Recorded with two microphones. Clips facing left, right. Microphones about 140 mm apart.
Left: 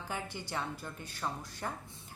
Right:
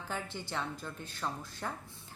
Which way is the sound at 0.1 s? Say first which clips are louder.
Even; 15° left (ahead or behind).